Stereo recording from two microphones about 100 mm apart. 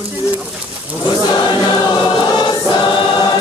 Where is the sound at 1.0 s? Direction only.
50° left (ahead or behind).